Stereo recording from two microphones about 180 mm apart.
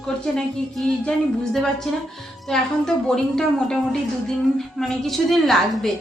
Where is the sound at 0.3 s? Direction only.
5° left (ahead or behind).